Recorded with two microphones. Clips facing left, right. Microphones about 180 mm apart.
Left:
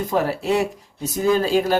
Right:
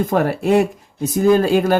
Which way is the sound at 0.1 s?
55° right (ahead or behind).